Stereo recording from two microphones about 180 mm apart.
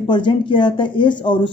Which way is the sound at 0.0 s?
25° left (ahead or behind).